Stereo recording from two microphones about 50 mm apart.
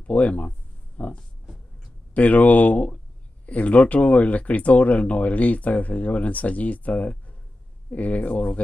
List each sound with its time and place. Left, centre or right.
0.0 s speech: left